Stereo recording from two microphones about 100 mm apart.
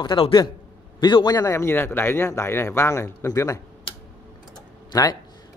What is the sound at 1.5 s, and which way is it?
Speech, 25° left (ahead or behind).